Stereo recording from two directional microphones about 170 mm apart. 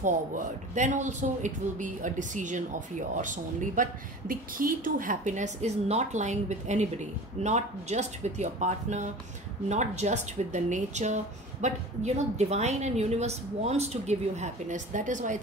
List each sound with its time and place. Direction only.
0.7 s a woman's voice: 45° right (ahead or behind)